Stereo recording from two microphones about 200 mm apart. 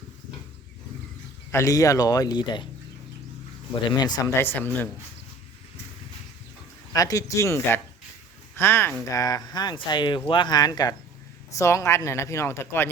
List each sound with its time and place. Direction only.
1.5 s speech: 15° left (ahead or behind)
3.9 s speech: 20° left (ahead or behind)
6.9 s speech: 15° left (ahead or behind)